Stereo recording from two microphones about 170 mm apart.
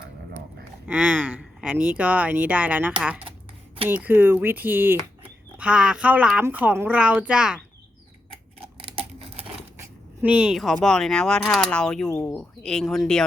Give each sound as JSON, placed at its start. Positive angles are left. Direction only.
{"t": 0.9, "sound": "speech", "side_deg": -10}
{"t": 8.5, "sound": "a sound", "side_deg": -35}
{"t": 9.7, "sound": "speech", "side_deg": -10}